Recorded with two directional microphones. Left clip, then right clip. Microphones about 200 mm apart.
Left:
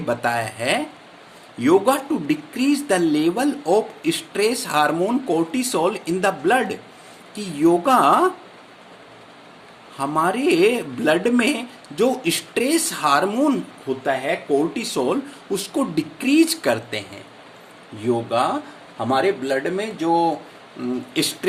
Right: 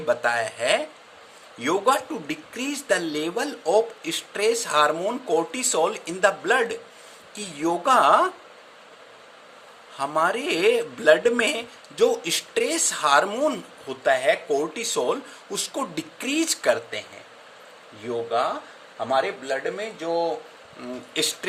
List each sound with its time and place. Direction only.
0.0 s speech: 15° right (ahead or behind)
10.0 s speech: 20° right (ahead or behind)
18.3 s speech: 5° right (ahead or behind)